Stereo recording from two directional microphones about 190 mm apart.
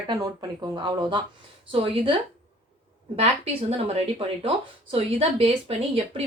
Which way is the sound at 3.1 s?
35° right (ahead or behind).